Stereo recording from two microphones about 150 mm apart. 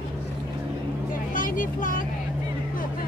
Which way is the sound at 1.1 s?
65° left (ahead or behind).